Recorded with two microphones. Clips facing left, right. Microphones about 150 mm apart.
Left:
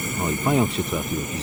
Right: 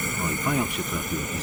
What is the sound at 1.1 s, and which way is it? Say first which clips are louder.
Speech: left 2 dB; 20° left (ahead or behind).